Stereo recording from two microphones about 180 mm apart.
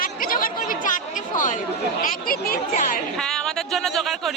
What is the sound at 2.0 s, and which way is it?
Speech, 50° left (ahead or behind).